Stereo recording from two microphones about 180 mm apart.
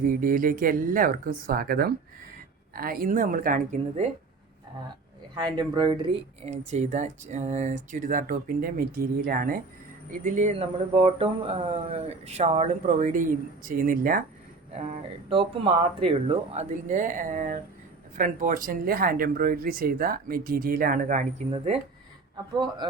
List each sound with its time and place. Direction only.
0.0 s speech: 50° right (ahead or behind)
5.3 s speech: 25° right (ahead or behind); by 14.3 s 50° right (ahead or behind)
15.3 s speech: 30° right (ahead or behind)
22.5 s a man's voice: 25° right (ahead or behind)